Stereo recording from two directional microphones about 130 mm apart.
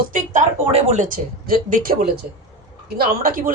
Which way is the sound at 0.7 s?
70° right (ahead or behind).